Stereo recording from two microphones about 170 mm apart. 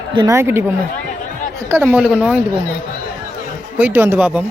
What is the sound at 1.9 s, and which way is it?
Speech, 5° right (ahead or behind).